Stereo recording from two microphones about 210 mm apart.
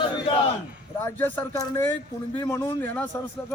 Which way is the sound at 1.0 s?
10° left (ahead or behind).